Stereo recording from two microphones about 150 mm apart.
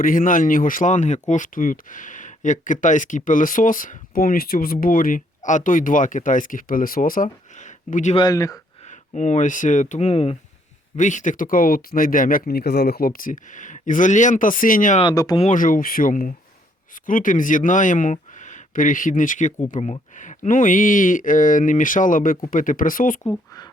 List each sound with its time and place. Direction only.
0.0 s speech: 65° left (ahead or behind)
8.1 s speech: 25° left (ahead or behind)
8.8 s speech: 50° left (ahead or behind)
10.9 s speech: 55° left (ahead or behind)
15.1 s speech: 25° left (ahead or behind)
15.4 s speech: 55° left (ahead or behind)